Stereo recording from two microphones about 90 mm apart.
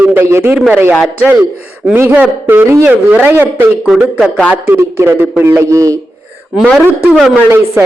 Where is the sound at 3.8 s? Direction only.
Centre (ahead or behind).